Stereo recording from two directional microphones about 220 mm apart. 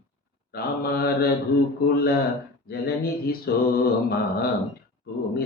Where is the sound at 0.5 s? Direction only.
45° left (ahead or behind).